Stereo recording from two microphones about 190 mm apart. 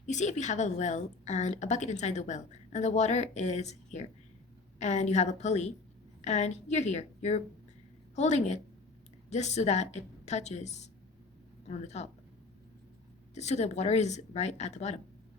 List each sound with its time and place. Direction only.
0.0 s a woman's voice: 40° left (ahead or behind)
13.3 s a woman's voice: 35° left (ahead or behind)